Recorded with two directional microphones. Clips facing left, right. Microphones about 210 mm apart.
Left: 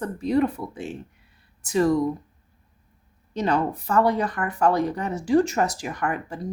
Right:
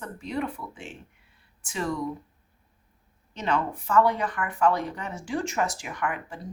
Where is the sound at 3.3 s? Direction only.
35° left (ahead or behind).